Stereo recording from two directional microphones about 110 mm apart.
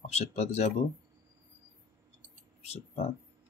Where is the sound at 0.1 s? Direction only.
80° left.